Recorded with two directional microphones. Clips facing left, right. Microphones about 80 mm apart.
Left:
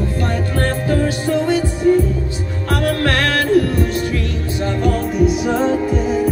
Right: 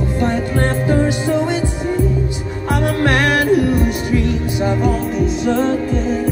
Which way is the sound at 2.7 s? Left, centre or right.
Right.